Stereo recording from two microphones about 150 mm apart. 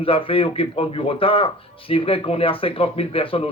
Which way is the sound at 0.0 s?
35° left (ahead or behind).